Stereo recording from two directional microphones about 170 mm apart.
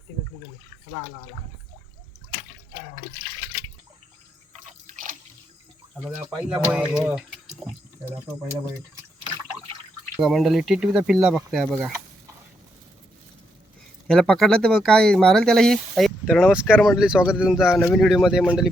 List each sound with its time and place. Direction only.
4.5 s drip: 45° right (ahead or behind)
6.1 s speech: centre (ahead or behind)
10.2 s speech: centre (ahead or behind)
14.1 s speech: 5° left (ahead or behind)